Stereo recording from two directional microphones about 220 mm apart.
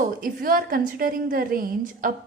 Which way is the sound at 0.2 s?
40° right (ahead or behind).